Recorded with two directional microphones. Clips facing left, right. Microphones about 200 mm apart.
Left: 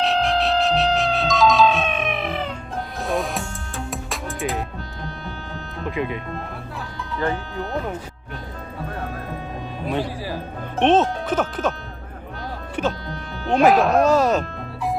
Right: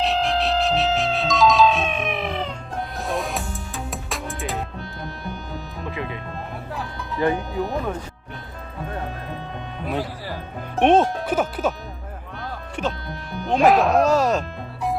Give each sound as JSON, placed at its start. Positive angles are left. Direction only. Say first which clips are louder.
{"t": 0.0, "sound": "music", "louder": "left 1 dB", "side_deg": 0}
{"t": 5.9, "sound": "speech", "louder": "left 5 dB", "side_deg": 20}
{"t": 7.2, "sound": "speech", "louder": "right 3 dB", "side_deg": -15}
{"t": 10.8, "sound": "speech", "louder": "right 1 dB", "side_deg": -10}
{"t": 12.8, "sound": "speech", "louder": "left 3 dB", "side_deg": 0}